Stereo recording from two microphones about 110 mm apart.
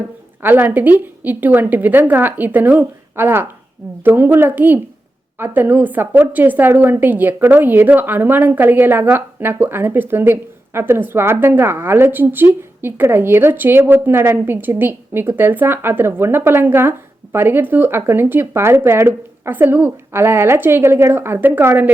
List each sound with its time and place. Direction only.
0.4 s a woman's voice: 15° right (ahead or behind)